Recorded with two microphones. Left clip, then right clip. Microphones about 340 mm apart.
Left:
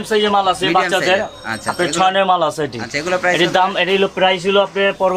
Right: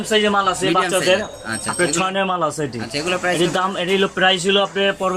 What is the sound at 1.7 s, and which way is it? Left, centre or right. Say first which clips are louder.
Speech: left 5 dB; left.